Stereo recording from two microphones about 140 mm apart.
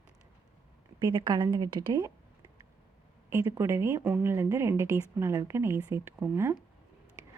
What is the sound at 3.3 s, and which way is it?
Speech, 15° right (ahead or behind).